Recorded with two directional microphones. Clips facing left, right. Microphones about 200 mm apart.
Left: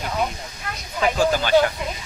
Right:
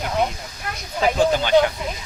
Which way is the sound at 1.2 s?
20° right (ahead or behind).